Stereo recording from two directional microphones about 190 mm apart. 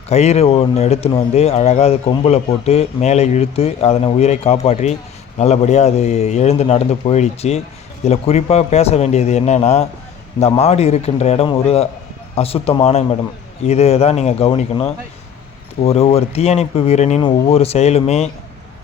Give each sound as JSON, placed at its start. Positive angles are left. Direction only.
{"t": 0.1, "sound": "speech", "side_deg": 35}